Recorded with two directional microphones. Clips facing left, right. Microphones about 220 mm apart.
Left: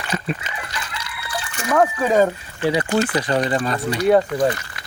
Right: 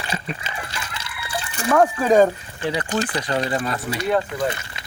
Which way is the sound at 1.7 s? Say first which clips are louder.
Right 1 dB; 5° left (ahead or behind).